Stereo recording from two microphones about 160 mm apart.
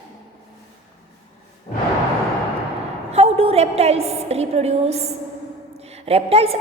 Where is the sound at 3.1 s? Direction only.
40° right (ahead or behind).